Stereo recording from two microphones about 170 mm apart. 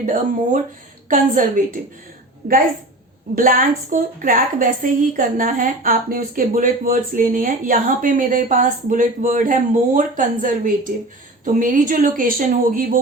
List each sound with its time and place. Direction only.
0.0 s a woman's voice: 50° right (ahead or behind)